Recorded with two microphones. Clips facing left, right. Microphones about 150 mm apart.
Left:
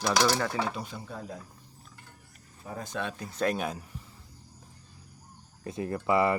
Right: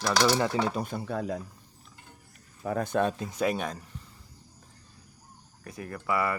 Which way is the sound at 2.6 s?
70° right (ahead or behind).